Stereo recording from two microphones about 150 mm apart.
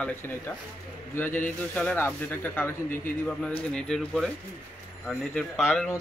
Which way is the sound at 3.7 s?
5° left (ahead or behind).